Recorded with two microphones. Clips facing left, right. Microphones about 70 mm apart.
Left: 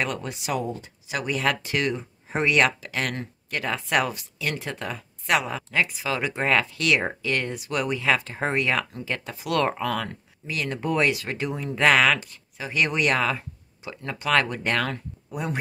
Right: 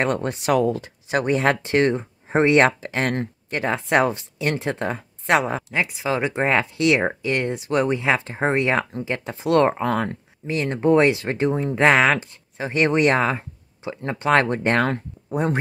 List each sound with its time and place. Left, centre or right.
0.0 s speech: right
1.0 s speech: right